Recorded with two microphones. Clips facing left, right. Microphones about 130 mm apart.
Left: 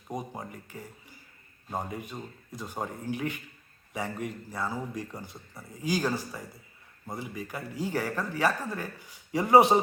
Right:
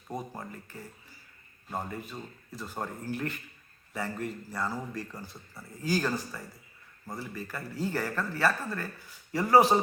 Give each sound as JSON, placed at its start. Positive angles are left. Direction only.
{"t": 0.1, "sound": "speech", "side_deg": 15}